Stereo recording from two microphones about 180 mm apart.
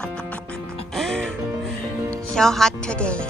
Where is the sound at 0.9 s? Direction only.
Centre (ahead or behind).